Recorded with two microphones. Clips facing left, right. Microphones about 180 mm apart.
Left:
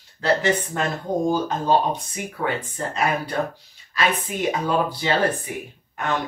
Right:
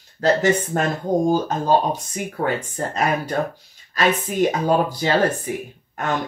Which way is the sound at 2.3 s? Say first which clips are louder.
Right 3 dB; 45° right (ahead or behind).